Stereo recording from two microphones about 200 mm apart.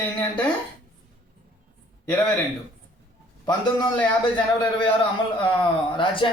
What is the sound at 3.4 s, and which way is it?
Speech, 20° left (ahead or behind).